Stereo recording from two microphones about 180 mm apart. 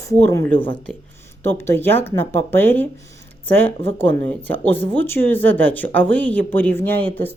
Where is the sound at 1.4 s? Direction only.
15° left (ahead or behind).